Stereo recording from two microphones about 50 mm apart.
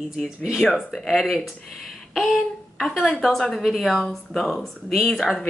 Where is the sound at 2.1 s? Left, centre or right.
Centre.